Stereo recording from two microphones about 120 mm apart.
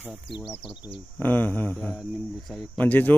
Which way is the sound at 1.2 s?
15° left (ahead or behind).